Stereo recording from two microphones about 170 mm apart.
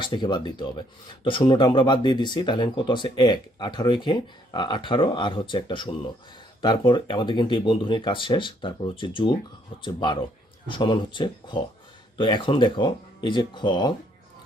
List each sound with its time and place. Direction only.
0.0 s speech: 25° left (ahead or behind)